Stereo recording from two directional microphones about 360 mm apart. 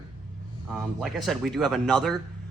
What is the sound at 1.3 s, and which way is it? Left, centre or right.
Speech, centre.